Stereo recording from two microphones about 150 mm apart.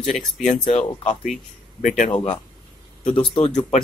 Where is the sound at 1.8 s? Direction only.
60° left (ahead or behind).